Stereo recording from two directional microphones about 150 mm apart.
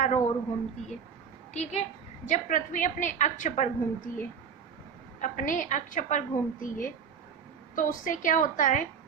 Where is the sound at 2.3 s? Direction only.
60° left (ahead or behind).